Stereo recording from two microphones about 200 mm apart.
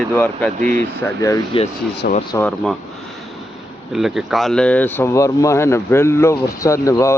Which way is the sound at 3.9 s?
Centre (ahead or behind).